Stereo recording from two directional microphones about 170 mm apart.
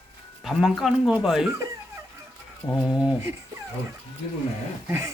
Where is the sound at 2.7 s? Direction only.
5° right (ahead or behind).